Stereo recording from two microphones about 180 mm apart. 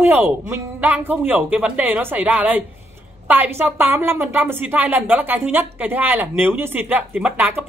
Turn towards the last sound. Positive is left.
turn(degrees=-10)  # may be behind; listen again after turning